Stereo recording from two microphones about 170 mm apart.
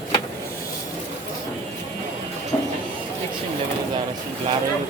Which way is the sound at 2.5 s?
10° left (ahead or behind).